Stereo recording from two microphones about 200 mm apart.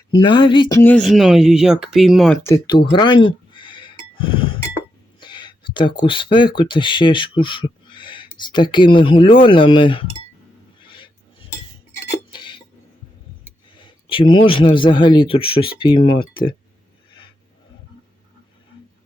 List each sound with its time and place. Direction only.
0.2 s speech: 25° left (ahead or behind)
0.8 s speech: 10° left (ahead or behind)
1.0 s speech: centre (ahead or behind)
2.4 s speech: 20° left (ahead or behind)
2.9 s music: 20° left (ahead or behind)
5.2 s speech: 20° left (ahead or behind)
10.8 s a sound: 25° left (ahead or behind)
13.7 s a man's voice: 25° left (ahead or behind)